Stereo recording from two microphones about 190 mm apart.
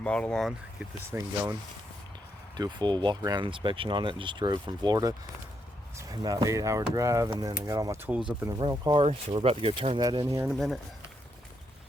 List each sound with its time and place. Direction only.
0.0 s speech: 5° left (ahead or behind)
1.1 s speech: 15° right (ahead or behind)
2.6 s speech: 25° right (ahead or behind)
10.5 s speech: centre (ahead or behind)